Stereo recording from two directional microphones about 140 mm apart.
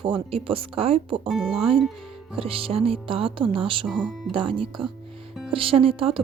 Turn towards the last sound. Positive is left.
turn(degrees=-40)  # may be behind; listen again after turning